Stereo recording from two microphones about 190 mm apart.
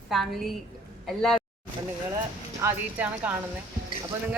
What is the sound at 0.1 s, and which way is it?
A woman's voice, centre (ahead or behind).